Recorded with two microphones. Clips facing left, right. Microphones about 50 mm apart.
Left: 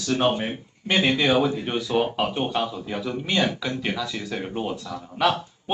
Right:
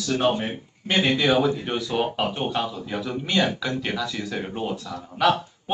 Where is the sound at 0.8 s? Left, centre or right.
Centre.